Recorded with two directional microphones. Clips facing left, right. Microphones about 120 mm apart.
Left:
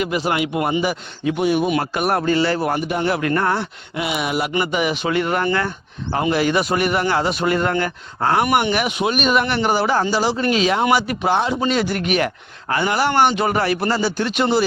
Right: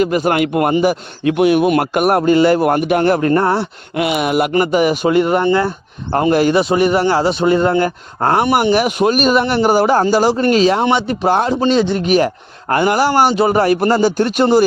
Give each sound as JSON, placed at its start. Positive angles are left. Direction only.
{"t": 0.0, "sound": "speech", "side_deg": -45}
{"t": 1.2, "sound": "a man's voice", "side_deg": -70}
{"t": 3.2, "sound": "speech", "side_deg": -35}
{"t": 3.9, "sound": "a man's voice", "side_deg": -60}
{"t": 4.5, "sound": "speech", "side_deg": -40}
{"t": 5.4, "sound": "speech", "side_deg": -25}
{"t": 6.1, "sound": "speech", "side_deg": -50}
{"t": 6.6, "sound": "speech", "side_deg": -30}
{"t": 11.3, "sound": "speech", "side_deg": -45}
{"t": 11.5, "sound": "speech", "side_deg": -30}
{"t": 12.0, "sound": "speech", "side_deg": -35}